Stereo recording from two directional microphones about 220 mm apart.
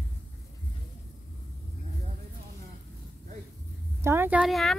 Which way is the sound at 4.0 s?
10° right (ahead or behind).